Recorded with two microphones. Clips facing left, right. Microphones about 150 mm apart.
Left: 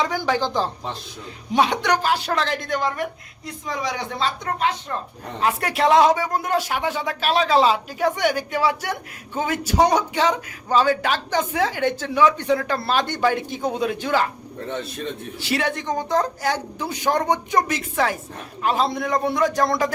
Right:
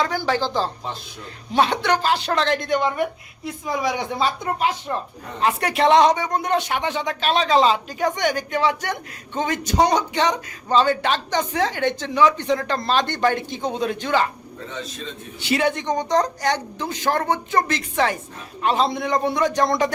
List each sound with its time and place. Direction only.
0.1 s a woman's voice: 15° left (ahead or behind); by 4.9 s 10° right (ahead or behind)
5.4 s speech: centre (ahead or behind)
14.7 s a man's voice: 55° left (ahead or behind)
15.4 s a woman's voice: centre (ahead or behind)